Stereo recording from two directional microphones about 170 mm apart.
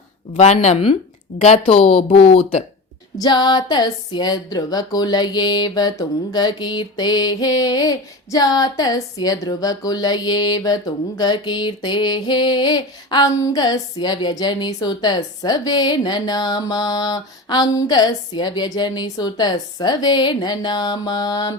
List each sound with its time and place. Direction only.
0.3 s speech: 40° left (ahead or behind)
3.2 s speech: 25° left (ahead or behind)